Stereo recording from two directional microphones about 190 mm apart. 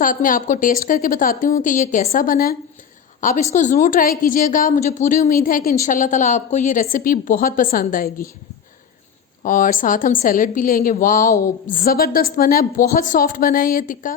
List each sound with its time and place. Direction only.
0.0 s a woman's voice: 45° left (ahead or behind)
9.4 s a woman's voice: 45° left (ahead or behind)